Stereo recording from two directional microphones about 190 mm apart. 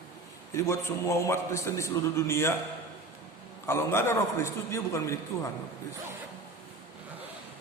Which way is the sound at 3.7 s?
15° left (ahead or behind).